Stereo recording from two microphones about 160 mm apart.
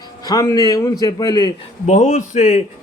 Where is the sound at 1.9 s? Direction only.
50° left (ahead or behind).